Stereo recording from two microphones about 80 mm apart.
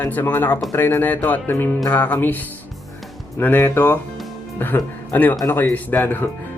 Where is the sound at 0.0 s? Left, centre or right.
Left.